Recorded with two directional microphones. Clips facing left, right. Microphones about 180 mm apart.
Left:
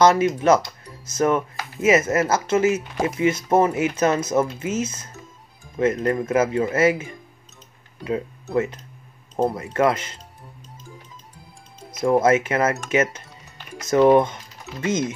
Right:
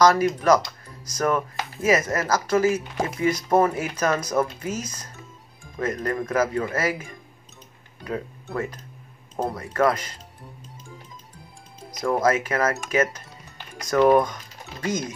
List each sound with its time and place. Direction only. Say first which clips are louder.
0.0 s speech: left 2 dB; 25° left (ahead or behind)
9.6 s speech: left 2 dB; 25° left (ahead or behind)
12.0 s speech: left 4 dB; 25° left (ahead or behind)